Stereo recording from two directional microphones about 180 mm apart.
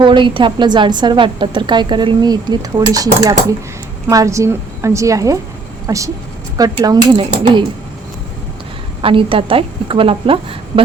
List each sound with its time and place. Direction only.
0.0 s a woman's voice: 25° right (ahead or behind)
9.0 s a woman's voice: 30° right (ahead or behind)